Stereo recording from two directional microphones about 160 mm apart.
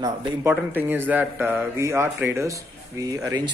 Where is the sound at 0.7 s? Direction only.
10° right (ahead or behind).